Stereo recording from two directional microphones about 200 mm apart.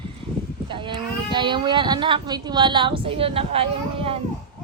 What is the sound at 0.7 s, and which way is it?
Speech, 25° right (ahead or behind).